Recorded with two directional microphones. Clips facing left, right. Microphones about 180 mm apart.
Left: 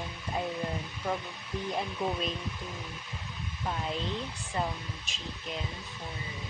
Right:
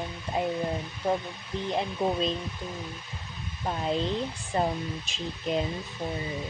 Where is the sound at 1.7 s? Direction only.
25° right (ahead or behind).